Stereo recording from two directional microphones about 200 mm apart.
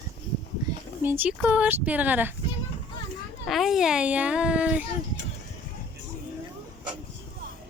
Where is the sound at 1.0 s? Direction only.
10° right (ahead or behind).